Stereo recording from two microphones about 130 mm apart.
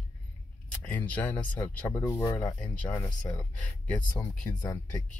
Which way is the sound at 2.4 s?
10° left (ahead or behind).